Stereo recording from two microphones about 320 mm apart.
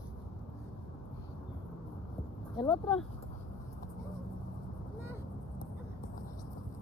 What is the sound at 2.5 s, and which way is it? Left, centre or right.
Speech, centre.